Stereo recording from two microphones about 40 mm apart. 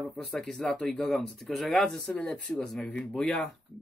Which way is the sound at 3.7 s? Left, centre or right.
Centre.